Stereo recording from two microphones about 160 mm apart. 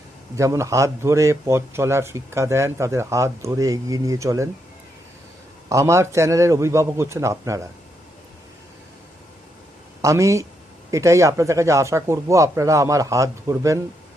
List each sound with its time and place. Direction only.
0.3 s speech: 20° right (ahead or behind)
5.6 s speech: 20° right (ahead or behind)
10.0 s speech: 20° right (ahead or behind)